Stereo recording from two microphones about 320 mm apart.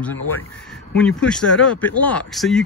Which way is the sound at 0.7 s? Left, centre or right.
Centre.